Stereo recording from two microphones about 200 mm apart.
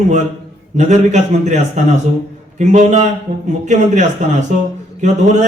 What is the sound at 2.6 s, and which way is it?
A man's voice, 35° right (ahead or behind).